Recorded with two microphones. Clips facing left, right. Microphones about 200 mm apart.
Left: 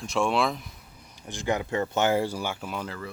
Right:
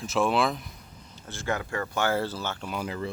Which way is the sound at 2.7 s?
15° right (ahead or behind).